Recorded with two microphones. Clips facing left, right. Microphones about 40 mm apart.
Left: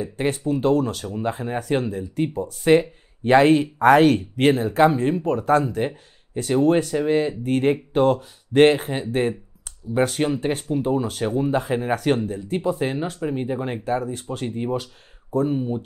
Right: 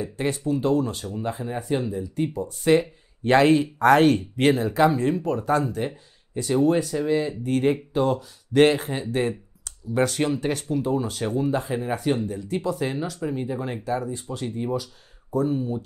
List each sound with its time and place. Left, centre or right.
0.0 s speech: left
1.6 s speech: left